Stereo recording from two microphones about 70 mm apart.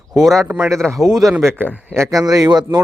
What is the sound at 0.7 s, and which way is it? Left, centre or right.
Speech, centre.